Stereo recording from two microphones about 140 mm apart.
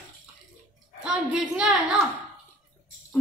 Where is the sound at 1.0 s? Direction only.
5° right (ahead or behind).